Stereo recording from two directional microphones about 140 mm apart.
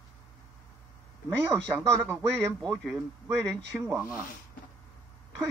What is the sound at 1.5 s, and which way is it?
Speech, 20° right (ahead or behind).